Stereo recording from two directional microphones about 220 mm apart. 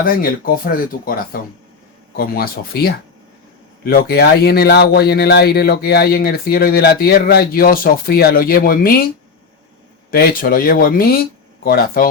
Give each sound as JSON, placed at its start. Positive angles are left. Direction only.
{"t": 0.0, "sound": "speech", "side_deg": 40}
{"t": 10.1, "sound": "speech", "side_deg": 40}